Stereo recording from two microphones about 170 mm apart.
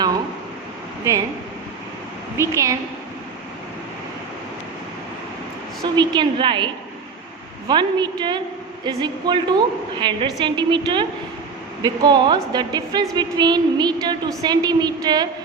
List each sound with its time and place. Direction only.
2.4 s a woman's voice: 15° right (ahead or behind)
5.8 s a woman's voice: 25° right (ahead or behind)
7.7 s a woman's voice: 25° right (ahead or behind)